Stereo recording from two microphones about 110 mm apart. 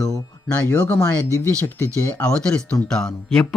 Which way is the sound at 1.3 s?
30° right (ahead or behind).